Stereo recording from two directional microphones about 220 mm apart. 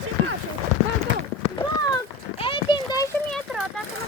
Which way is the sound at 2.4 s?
20° left (ahead or behind).